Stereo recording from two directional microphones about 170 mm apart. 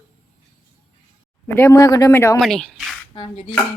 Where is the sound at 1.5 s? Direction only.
15° left (ahead or behind).